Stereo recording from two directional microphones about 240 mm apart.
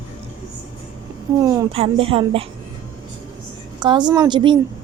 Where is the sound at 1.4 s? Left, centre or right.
Centre.